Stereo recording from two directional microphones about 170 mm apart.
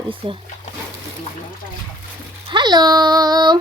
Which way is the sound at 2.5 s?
25° right (ahead or behind).